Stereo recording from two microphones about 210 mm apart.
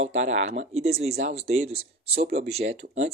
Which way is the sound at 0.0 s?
35° right (ahead or behind).